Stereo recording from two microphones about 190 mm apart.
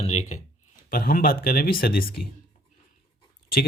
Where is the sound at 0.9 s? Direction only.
50° left (ahead or behind).